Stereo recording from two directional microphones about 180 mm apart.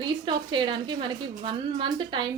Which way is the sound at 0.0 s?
25° right (ahead or behind).